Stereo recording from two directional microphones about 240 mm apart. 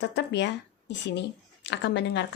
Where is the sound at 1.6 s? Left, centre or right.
Left.